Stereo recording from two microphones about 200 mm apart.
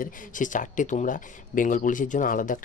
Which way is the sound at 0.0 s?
40° left (ahead or behind).